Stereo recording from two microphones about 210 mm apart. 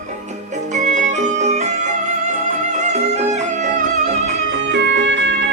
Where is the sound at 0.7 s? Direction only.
35° right (ahead or behind).